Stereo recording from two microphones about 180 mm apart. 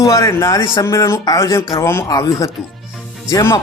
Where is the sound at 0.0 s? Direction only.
15° left (ahead or behind).